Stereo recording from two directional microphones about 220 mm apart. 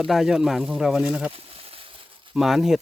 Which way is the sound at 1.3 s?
25° right (ahead or behind).